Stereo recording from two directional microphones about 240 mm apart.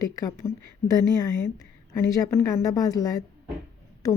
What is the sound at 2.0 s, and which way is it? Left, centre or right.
Speech, centre.